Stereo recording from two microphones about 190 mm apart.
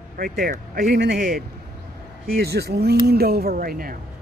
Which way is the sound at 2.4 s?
55° right (ahead or behind).